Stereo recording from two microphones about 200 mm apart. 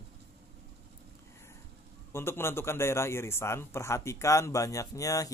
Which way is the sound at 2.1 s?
10° left (ahead or behind).